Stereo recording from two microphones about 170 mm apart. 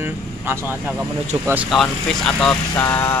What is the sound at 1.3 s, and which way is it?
Speech, 30° right (ahead or behind).